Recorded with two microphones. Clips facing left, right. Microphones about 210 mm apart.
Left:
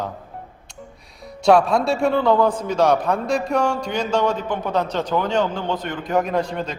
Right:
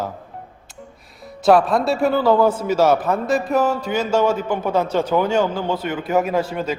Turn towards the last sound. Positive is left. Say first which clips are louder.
# right 2 dB
turn(degrees=-5)  # may be behind; listen again after turning